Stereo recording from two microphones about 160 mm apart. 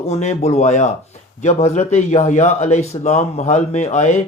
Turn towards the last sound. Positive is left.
turn(degrees=45)  # may be behind; listen again after turning